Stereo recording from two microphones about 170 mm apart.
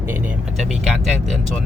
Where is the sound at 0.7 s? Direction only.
Centre (ahead or behind).